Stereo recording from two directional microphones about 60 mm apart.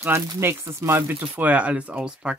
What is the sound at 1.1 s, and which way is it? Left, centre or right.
Speech, right.